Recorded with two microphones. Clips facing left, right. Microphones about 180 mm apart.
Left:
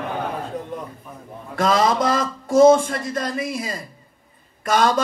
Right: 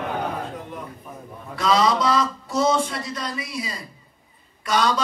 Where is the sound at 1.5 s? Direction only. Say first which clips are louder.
Left 1 dB; 50° left (ahead or behind).